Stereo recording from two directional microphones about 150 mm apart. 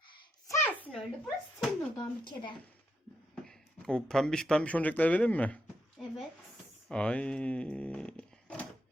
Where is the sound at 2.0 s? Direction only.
30° left (ahead or behind).